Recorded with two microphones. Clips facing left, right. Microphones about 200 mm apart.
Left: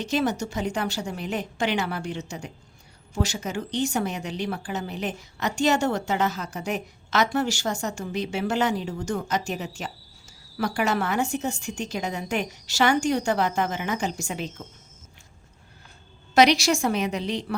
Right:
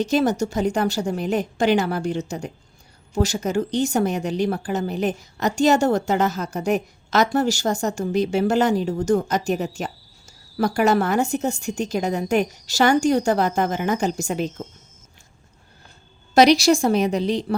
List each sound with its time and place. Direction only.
0.0 s speech: 40° right (ahead or behind)
16.3 s speech: 35° right (ahead or behind)